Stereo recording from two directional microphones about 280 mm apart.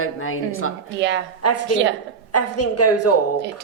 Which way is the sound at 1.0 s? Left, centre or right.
Right.